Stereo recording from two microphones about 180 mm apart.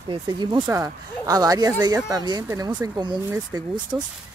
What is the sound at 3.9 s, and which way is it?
Speech, 5° right (ahead or behind).